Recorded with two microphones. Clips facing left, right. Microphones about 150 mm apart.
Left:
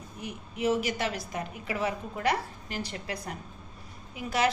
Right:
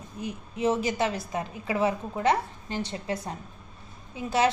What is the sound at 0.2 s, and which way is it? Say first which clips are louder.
A woman's voice: right 3 dB; 30° right (ahead or behind).